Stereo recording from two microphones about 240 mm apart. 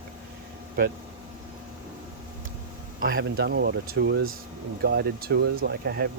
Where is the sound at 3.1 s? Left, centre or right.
Right.